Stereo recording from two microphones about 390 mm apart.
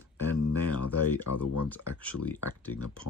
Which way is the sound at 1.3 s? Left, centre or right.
Left.